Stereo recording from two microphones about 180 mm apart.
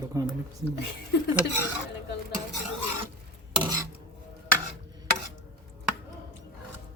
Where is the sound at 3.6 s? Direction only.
20° right (ahead or behind).